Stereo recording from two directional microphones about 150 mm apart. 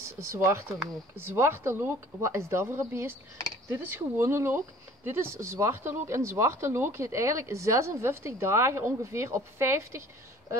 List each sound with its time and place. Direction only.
0.0 s speech: 20° right (ahead or behind)